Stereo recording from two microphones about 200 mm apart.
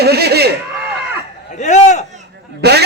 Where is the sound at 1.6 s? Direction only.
35° left (ahead or behind).